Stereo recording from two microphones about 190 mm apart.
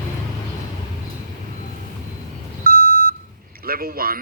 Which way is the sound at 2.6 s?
50° right (ahead or behind).